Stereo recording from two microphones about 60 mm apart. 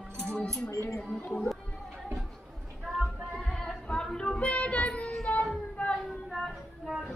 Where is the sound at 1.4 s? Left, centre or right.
Centre.